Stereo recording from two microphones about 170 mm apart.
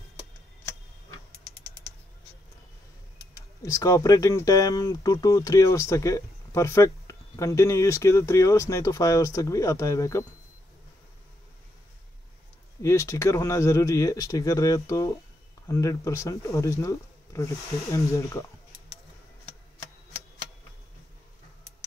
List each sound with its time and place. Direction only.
3.3 s speech: 20° left (ahead or behind)
12.8 s speech: 15° left (ahead or behind)